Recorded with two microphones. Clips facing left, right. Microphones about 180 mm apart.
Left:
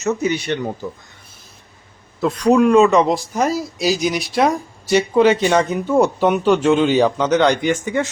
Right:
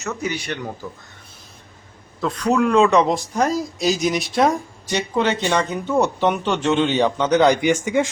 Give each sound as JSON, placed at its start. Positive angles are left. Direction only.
{"t": 0.0, "sound": "speech", "side_deg": 20}
{"t": 2.2, "sound": "speech", "side_deg": 15}
{"t": 2.8, "sound": "speech", "side_deg": 0}